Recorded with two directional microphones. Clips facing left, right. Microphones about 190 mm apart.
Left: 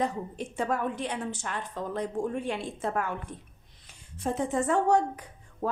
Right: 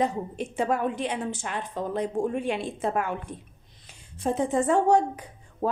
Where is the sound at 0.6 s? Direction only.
20° right (ahead or behind).